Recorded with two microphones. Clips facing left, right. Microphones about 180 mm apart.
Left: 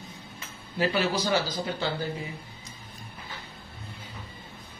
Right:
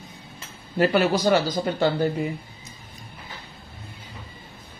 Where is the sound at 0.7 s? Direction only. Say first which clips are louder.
Right 6 dB; 55° right (ahead or behind).